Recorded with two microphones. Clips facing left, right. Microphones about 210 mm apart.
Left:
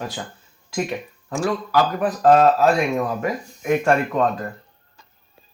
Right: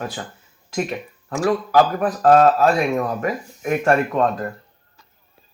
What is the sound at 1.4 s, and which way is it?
Speech, 50° right (ahead or behind).